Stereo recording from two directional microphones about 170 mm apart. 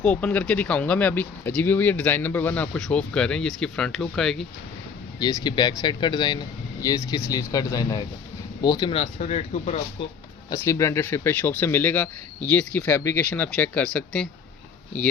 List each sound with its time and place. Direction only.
0.0 s speech: 5° left (ahead or behind)
5.2 s speech: 25° left (ahead or behind)
9.0 s speech: 40° left (ahead or behind)
10.5 s speech: 20° left (ahead or behind)